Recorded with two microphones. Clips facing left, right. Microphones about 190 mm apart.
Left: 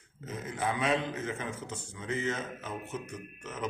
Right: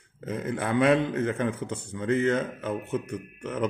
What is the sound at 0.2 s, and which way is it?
Speech, 60° right (ahead or behind).